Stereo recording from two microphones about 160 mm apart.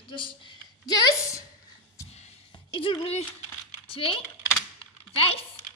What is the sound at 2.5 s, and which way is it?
A woman's voice, 30° left (ahead or behind).